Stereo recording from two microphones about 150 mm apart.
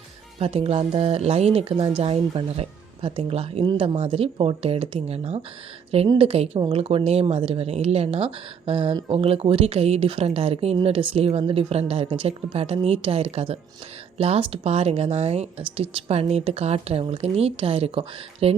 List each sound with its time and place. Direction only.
0.3 s speech: 40° right (ahead or behind)